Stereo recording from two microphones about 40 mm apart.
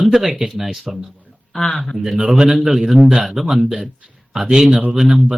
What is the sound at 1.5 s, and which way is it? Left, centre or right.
Speech, centre.